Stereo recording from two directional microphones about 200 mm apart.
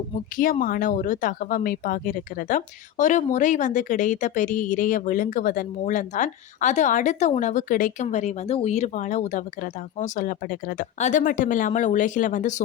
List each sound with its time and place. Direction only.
0.6 s speech: 45° left (ahead or behind)